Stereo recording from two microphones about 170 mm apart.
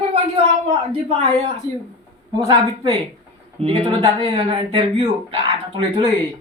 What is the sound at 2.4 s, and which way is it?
A woman's voice, 25° right (ahead or behind).